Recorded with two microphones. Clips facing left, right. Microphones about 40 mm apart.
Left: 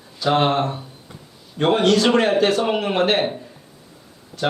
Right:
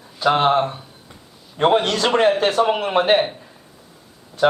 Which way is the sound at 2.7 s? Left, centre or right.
Centre.